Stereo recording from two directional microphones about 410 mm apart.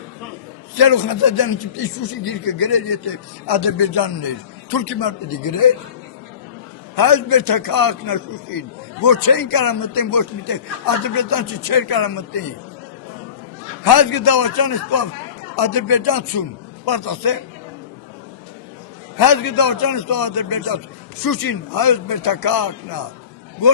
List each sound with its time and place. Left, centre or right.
0.8 s speech: left
6.9 s speech: left
13.8 s speech: left
19.1 s speech: left